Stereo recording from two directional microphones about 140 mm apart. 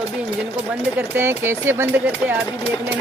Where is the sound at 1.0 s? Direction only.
15° right (ahead or behind).